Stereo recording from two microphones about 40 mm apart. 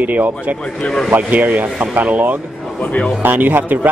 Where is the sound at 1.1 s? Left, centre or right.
Right.